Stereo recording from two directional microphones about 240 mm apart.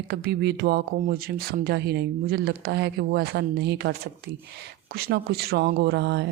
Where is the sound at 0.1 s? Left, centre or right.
Right.